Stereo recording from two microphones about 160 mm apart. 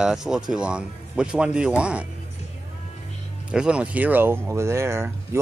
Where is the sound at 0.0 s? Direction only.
5° right (ahead or behind).